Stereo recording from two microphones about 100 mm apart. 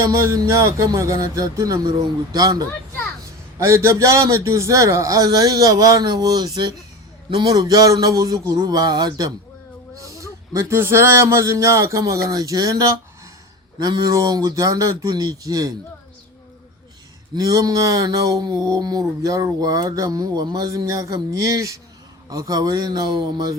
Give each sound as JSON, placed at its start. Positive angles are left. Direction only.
{"t": 0.0, "sound": "a man's voice", "side_deg": -30}
{"t": 3.6, "sound": "a man's voice", "side_deg": -30}
{"t": 17.3, "sound": "a man's voice", "side_deg": -35}